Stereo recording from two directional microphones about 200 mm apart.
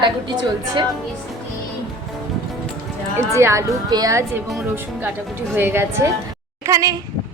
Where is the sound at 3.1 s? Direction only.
15° right (ahead or behind).